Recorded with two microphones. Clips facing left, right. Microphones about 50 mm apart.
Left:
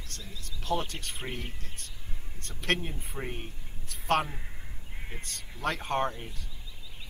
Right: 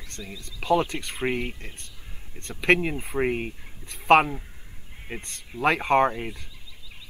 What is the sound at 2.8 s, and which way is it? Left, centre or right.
Speech, right.